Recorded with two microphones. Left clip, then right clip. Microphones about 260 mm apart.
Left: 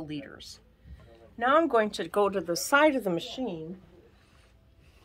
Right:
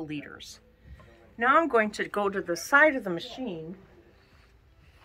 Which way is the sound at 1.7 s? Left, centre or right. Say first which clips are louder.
Even; left.